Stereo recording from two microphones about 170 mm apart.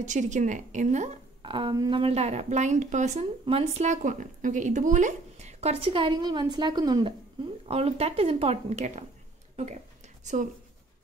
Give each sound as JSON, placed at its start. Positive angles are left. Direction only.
{"t": 0.0, "sound": "a woman's voice", "side_deg": -45}
{"t": 1.4, "sound": "a woman's voice", "side_deg": -30}
{"t": 7.6, "sound": "a woman's voice", "side_deg": -35}
{"t": 9.6, "sound": "a sound", "side_deg": -45}